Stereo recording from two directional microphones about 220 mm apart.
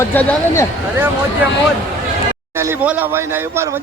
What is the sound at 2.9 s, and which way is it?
Speech, 10° right (ahead or behind).